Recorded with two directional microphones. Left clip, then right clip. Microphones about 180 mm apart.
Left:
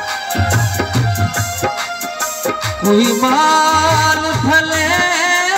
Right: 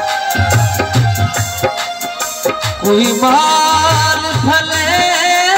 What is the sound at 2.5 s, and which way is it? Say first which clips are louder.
Music: right 2 dB; 15° right (ahead or behind).